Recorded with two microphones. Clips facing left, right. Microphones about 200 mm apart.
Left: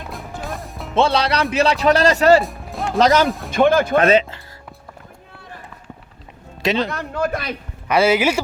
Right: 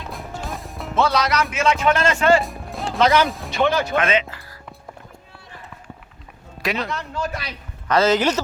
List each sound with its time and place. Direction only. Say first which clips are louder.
0.1 s music: left 1 dB; centre (ahead or behind)
0.9 s speech: left 2 dB; 30° left (ahead or behind)
2.4 s music: left 2 dB; centre (ahead or behind)
3.0 s speech: left 2 dB; 45° left (ahead or behind)
3.9 s speech: left 6 dB; 35° left (ahead or behind)
6.6 s speech: left 5 dB; 25° left (ahead or behind)
6.9 s speech: left 5 dB; 55° left (ahead or behind)
7.9 s a man's voice: left 2 dB; 10° left (ahead or behind)